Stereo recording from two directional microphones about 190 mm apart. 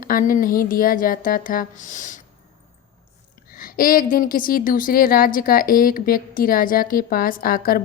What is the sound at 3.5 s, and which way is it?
A woman's voice, 50° left (ahead or behind).